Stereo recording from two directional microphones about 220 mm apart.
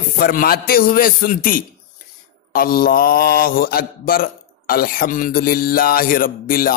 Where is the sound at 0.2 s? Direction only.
40° left (ahead or behind).